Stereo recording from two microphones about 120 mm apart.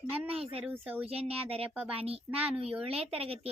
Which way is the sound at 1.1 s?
55° right (ahead or behind).